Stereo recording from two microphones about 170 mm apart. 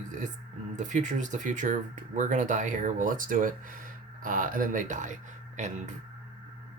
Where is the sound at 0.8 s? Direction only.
45° right (ahead or behind).